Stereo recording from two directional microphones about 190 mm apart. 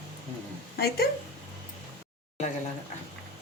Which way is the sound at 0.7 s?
55° left (ahead or behind).